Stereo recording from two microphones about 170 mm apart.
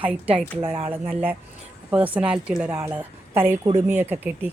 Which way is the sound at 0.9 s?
10° right (ahead or behind).